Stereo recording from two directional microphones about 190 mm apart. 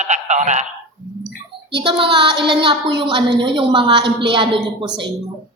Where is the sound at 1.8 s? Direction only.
25° right (ahead or behind).